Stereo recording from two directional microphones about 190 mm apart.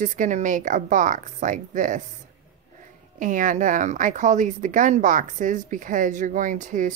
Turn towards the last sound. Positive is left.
turn(degrees=-40)  # may be behind; listen again after turning